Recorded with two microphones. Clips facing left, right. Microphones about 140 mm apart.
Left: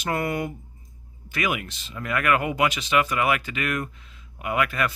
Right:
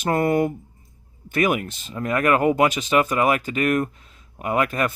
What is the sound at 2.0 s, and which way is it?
Speech, 35° right (ahead or behind).